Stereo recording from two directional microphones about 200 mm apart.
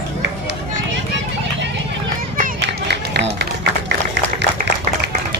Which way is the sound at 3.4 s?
55° right (ahead or behind).